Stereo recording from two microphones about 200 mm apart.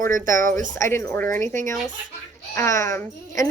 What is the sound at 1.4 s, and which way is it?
Speech, 40° right (ahead or behind).